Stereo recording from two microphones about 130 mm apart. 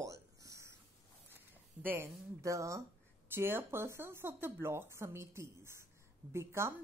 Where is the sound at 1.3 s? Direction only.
15° right (ahead or behind).